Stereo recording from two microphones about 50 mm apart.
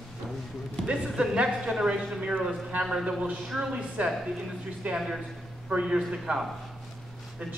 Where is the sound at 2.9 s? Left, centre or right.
Centre.